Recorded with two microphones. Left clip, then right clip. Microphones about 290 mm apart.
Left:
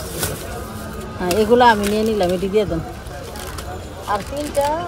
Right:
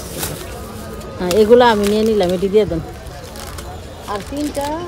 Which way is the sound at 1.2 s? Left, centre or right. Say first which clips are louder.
Right 3 dB; right.